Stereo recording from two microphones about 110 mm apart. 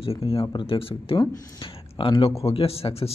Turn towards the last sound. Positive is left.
turn(degrees=65)  # may be behind; listen again after turning